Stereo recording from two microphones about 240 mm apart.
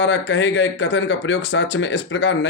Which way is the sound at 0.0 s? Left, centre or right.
Left.